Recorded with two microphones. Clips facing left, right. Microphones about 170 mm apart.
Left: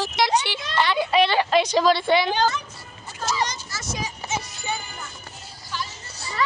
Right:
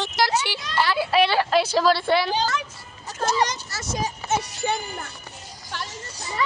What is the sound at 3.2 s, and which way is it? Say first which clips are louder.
Music: right 3 dB; 60° right (ahead or behind).